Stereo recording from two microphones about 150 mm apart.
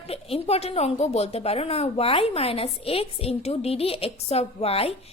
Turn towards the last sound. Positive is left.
turn(degrees=40)  # may be behind; listen again after turning